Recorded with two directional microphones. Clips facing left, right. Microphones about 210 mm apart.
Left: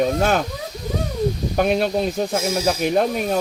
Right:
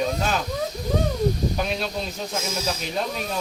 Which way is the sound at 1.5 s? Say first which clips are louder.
Left 8 dB; 55° left (ahead or behind).